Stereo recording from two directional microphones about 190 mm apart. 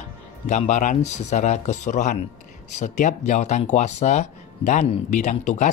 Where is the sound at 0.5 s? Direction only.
40° left (ahead or behind).